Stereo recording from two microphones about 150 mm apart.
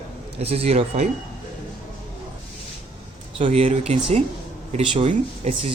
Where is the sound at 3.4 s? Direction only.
45° right (ahead or behind).